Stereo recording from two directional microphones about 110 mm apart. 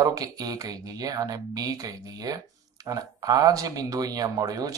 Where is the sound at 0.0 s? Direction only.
35° right (ahead or behind).